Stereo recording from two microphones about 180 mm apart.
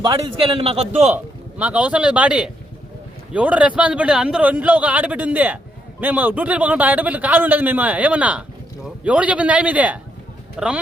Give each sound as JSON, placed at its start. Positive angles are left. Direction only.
{"t": 0.0, "sound": "a man's voice", "side_deg": -25}
{"t": 1.1, "sound": "a man's voice", "side_deg": -10}